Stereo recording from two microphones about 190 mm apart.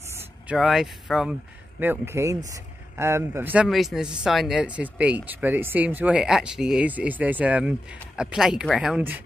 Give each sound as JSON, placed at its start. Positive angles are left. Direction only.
{"t": 0.1, "sound": "speech", "side_deg": -10}
{"t": 1.8, "sound": "a man's voice", "side_deg": -10}